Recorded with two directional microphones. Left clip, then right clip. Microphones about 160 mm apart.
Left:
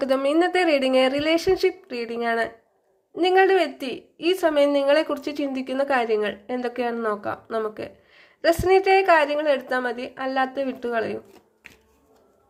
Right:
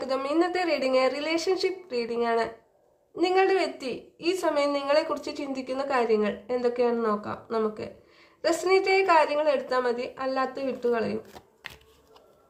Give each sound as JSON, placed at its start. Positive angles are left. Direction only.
{"t": 0.0, "sound": "a woman's voice", "side_deg": 30}